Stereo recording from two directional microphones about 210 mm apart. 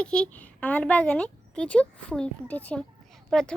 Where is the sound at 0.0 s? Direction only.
5° left (ahead or behind).